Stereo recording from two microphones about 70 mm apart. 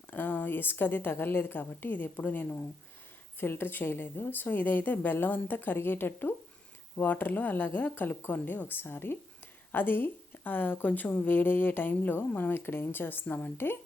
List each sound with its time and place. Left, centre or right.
0.1 s a woman's voice: left